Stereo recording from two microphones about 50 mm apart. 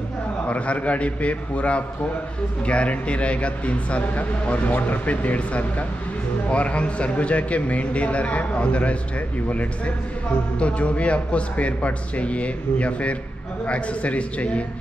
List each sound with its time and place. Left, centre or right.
0.5 s speech: left